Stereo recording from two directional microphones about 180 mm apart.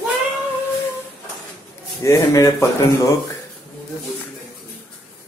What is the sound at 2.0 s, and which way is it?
Speech, 15° left (ahead or behind).